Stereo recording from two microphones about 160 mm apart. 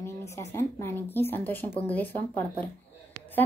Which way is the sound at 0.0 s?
15° left (ahead or behind).